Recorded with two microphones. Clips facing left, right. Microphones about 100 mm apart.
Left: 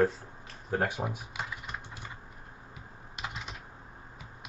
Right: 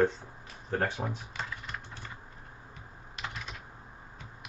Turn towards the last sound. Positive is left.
turn(degrees=15)  # may be behind; listen again after turning